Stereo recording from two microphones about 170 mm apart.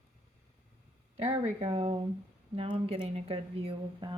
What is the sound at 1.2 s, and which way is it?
Speech, 40° right (ahead or behind).